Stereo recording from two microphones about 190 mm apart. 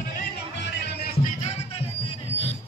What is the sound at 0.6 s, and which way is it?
Music, 65° left (ahead or behind).